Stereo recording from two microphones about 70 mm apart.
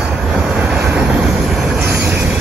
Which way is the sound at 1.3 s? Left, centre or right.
Centre.